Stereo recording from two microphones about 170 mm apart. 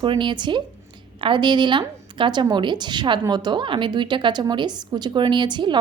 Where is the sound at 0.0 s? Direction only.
30° right (ahead or behind).